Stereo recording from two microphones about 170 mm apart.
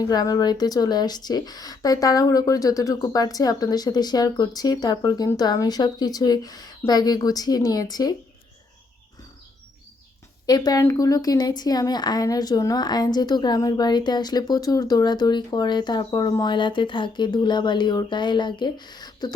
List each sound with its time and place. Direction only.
0.0 s a woman's voice: 20° left (ahead or behind)
10.4 s a woman's voice: 25° left (ahead or behind)